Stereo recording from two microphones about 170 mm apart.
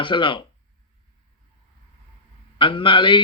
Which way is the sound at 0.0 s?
30° left (ahead or behind).